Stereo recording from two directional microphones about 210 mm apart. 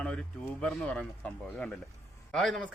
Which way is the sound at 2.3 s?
5° left (ahead or behind).